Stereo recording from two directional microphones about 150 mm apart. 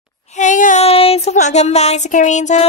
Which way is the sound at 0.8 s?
40° left (ahead or behind).